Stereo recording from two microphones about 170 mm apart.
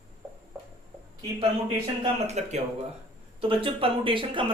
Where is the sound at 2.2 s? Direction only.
40° right (ahead or behind).